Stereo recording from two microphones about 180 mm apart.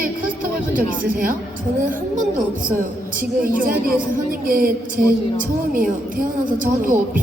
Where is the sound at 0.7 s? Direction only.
50° right (ahead or behind).